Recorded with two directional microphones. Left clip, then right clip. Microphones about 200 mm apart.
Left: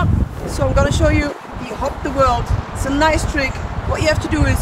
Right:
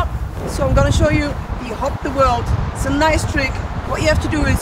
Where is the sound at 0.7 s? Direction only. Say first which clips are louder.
Even; 5° left (ahead or behind).